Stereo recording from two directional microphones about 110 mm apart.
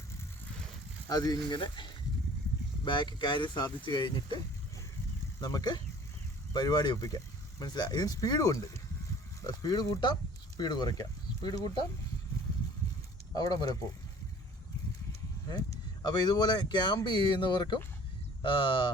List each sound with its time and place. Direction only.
1.0 s speech: 35° left (ahead or behind)
5.4 s speech: 35° left (ahead or behind)
13.3 s speech: 35° left (ahead or behind)
16.0 s speech: 40° left (ahead or behind)